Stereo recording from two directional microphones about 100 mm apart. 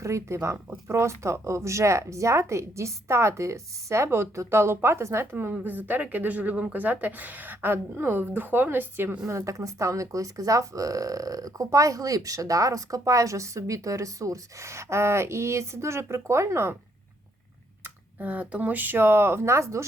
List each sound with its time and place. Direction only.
0.0 s speech: 30° right (ahead or behind)
17.8 s speech: 15° right (ahead or behind)